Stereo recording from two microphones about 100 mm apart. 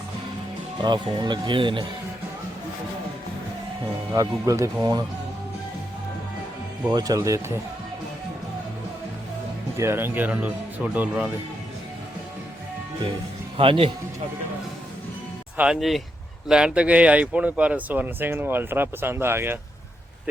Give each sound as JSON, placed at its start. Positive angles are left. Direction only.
{"t": 0.8, "sound": "speech", "side_deg": -50}
{"t": 4.1, "sound": "speech", "side_deg": -35}
{"t": 6.9, "sound": "speech", "side_deg": -40}
{"t": 9.7, "sound": "speech", "side_deg": -25}
{"t": 13.6, "sound": "speech", "side_deg": -65}
{"t": 15.5, "sound": "speech", "side_deg": -10}